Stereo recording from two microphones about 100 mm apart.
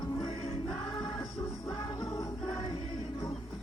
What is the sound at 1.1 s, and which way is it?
Music, 30° left (ahead or behind).